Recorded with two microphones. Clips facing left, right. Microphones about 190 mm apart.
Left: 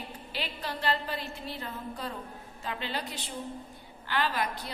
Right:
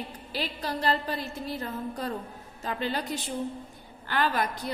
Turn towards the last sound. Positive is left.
turn(degrees=-50)  # may be behind; listen again after turning